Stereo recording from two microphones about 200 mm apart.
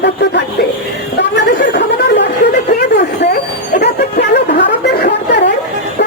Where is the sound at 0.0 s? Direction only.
60° left (ahead or behind).